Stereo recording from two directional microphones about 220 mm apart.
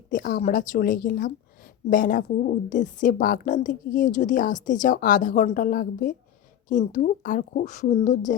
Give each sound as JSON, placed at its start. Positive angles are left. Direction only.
{"t": 0.1, "sound": "a woman's voice", "side_deg": 40}